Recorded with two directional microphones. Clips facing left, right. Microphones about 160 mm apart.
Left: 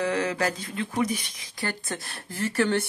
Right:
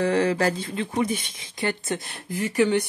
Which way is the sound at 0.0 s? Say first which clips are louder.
Right 5 dB; 30° right (ahead or behind).